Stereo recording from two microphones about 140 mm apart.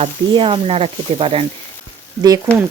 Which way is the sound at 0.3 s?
35° right (ahead or behind).